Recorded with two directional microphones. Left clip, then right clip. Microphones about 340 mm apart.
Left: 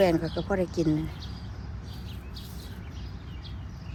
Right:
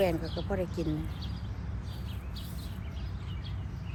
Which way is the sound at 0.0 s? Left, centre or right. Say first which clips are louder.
Left 6 dB; left.